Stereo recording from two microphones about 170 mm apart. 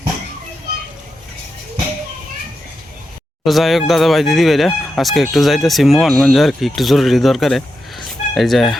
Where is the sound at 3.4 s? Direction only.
Centre (ahead or behind).